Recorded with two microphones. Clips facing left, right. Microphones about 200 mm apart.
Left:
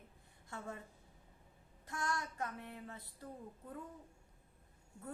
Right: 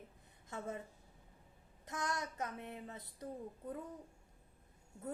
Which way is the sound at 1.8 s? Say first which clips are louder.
Even; 20° right (ahead or behind).